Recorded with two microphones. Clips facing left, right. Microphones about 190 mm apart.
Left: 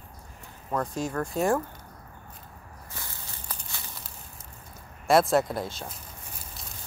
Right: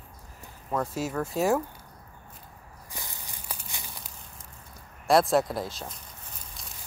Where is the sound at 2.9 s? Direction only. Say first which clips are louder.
Right 1 dB; 15° right (ahead or behind).